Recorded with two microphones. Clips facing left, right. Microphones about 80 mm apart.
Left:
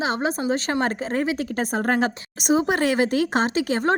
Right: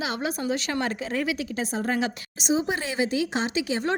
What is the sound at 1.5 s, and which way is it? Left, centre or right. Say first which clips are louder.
Speech: left 6 dB; left.